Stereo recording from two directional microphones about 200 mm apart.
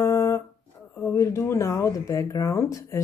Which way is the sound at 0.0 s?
15° left (ahead or behind).